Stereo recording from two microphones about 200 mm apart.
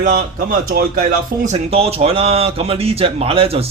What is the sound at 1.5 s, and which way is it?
Speech, 30° right (ahead or behind).